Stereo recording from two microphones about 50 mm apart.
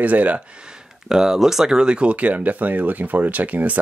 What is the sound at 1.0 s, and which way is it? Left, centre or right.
Speech, centre.